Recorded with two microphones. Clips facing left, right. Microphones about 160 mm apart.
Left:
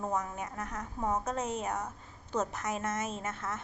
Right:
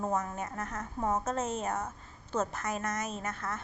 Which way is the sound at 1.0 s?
5° right (ahead or behind).